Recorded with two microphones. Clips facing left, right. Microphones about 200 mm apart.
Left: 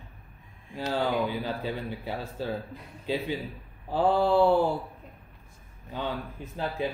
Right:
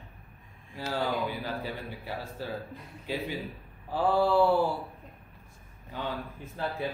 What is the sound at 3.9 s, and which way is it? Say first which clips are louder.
Speech: left 2 dB; 20° left (ahead or behind).